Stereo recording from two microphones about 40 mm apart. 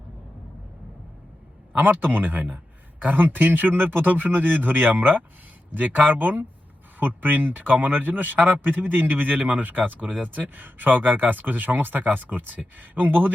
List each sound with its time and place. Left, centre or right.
1.7 s a man's voice: right